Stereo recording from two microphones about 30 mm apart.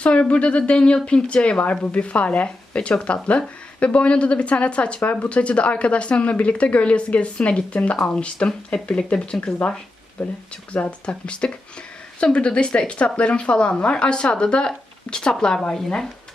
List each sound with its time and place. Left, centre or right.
0.0 s speech: left
7.9 s speech: left
10.8 s speech: left
15.7 s speech: centre